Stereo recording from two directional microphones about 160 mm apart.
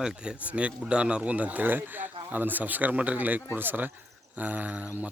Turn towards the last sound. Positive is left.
turn(degrees=-10)  # may be behind; listen again after turning